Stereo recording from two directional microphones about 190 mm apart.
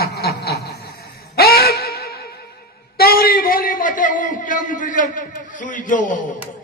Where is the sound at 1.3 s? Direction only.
55° left (ahead or behind).